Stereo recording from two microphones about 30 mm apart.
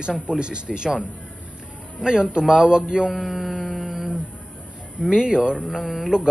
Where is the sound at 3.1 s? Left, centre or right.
Centre.